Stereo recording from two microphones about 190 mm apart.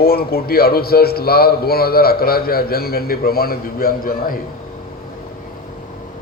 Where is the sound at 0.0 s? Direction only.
55° left (ahead or behind).